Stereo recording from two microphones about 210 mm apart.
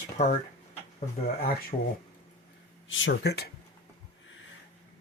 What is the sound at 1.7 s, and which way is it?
Speech, 35° left (ahead or behind).